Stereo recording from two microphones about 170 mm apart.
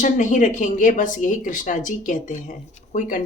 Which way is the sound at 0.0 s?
50° left (ahead or behind).